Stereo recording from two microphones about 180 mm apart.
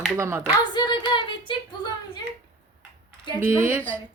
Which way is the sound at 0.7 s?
25° left (ahead or behind).